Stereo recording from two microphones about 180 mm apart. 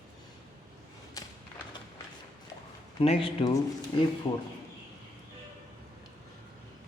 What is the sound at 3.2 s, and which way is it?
Speech, 20° left (ahead or behind).